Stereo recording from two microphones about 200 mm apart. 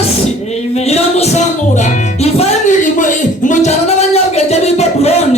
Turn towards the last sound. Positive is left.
turn(degrees=30)  # may be behind; listen again after turning